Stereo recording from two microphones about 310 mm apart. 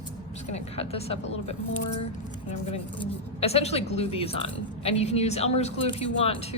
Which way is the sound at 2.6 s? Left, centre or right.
Centre.